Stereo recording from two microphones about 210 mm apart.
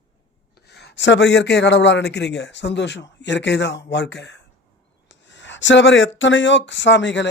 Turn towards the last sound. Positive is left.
turn(degrees=60)  # may be behind; listen again after turning